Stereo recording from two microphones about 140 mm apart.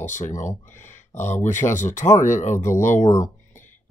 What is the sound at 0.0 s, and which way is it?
Speech, 60° left (ahead or behind).